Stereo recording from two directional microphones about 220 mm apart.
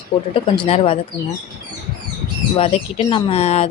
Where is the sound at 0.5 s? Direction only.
25° left (ahead or behind).